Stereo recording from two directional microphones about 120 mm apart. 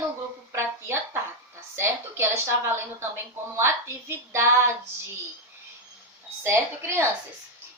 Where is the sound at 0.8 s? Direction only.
20° right (ahead or behind).